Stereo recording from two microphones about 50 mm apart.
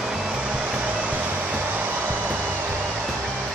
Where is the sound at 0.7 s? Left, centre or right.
Right.